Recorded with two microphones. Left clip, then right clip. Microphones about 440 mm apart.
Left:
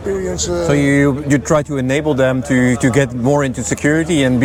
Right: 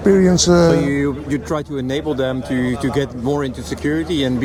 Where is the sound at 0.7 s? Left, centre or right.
Left.